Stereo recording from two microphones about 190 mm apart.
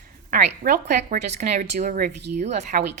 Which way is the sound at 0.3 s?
50° right (ahead or behind).